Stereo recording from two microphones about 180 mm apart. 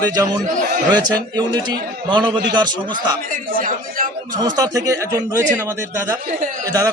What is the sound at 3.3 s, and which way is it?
Speech, 50° right (ahead or behind).